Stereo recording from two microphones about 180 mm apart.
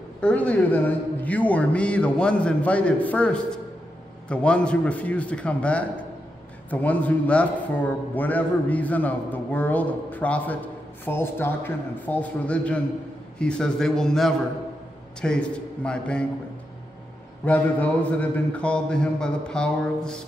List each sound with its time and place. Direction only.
0.2 s a man's voice: 5° left (ahead or behind)
17.5 s a man's voice: 10° left (ahead or behind)